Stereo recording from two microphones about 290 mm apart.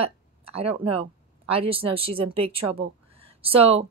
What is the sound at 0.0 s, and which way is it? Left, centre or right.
Speech, centre.